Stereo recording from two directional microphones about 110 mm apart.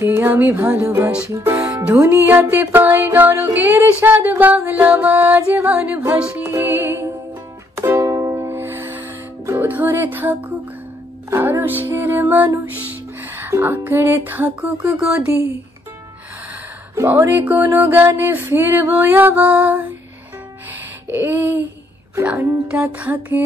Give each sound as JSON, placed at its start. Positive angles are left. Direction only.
{"t": 0.0, "sound": "music", "side_deg": -20}
{"t": 0.8, "sound": "music", "side_deg": -25}
{"t": 16.9, "sound": "music", "side_deg": -25}
{"t": 20.7, "sound": "a sound", "side_deg": -20}
{"t": 22.4, "sound": "music", "side_deg": -10}